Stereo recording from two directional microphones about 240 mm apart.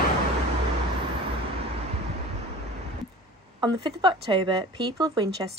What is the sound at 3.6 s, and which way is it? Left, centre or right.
A woman's voice, centre.